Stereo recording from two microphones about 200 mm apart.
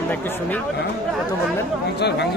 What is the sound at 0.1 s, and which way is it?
Speech, 10° left (ahead or behind).